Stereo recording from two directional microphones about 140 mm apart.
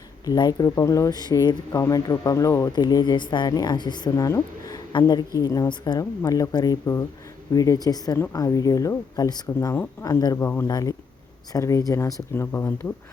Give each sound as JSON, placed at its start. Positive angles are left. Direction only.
{"t": 0.3, "sound": "speech", "side_deg": 30}